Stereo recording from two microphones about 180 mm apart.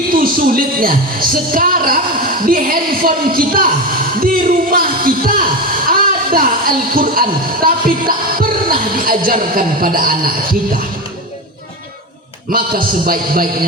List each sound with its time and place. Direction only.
0.1 s speech: 55° right (ahead or behind)
12.5 s speech: 50° right (ahead or behind)